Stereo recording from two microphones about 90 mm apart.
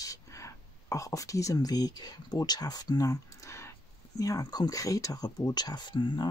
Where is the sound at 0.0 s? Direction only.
35° left (ahead or behind).